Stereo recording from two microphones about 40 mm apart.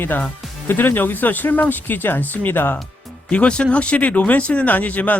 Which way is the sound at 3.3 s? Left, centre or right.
Left.